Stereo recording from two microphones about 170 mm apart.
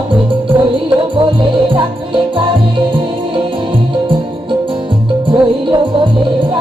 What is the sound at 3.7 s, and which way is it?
Music, 30° right (ahead or behind).